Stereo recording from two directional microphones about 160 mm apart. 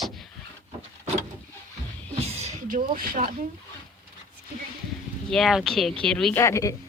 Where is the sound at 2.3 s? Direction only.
40° right (ahead or behind).